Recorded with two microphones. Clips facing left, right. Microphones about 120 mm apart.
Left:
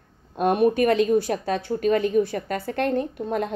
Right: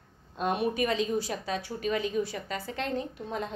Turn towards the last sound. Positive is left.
turn(degrees=60)  # may be behind; listen again after turning